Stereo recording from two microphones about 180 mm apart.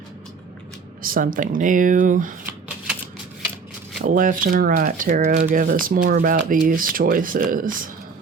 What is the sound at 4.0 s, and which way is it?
Speech, 50° right (ahead or behind).